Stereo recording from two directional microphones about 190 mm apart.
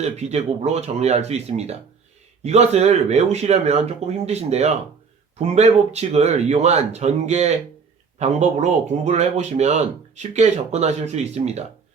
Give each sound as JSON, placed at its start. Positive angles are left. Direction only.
{"t": 0.0, "sound": "speech", "side_deg": -35}